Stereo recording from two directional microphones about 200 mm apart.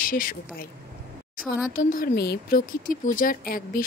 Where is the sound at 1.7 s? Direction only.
45° left (ahead or behind).